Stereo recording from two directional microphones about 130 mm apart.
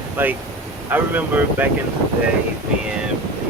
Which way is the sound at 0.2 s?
15° right (ahead or behind).